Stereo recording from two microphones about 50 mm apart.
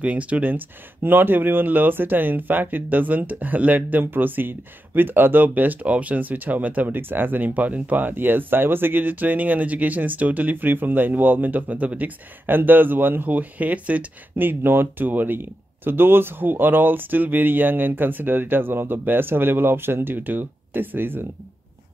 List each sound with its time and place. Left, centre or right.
0.0 s speech: right
14.3 s speech: right